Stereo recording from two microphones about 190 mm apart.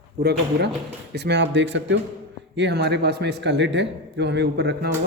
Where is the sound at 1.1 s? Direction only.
60° right (ahead or behind).